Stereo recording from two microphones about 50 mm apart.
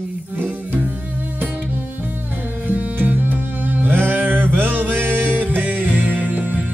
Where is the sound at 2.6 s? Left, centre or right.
Right.